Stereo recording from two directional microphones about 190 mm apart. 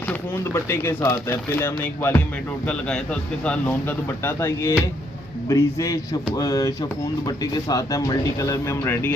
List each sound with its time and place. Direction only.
0.1 s speech: 15° left (ahead or behind)